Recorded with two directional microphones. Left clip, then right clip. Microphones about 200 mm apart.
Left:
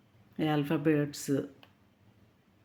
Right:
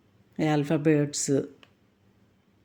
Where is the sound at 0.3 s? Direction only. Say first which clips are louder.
Right 5 dB; 25° right (ahead or behind).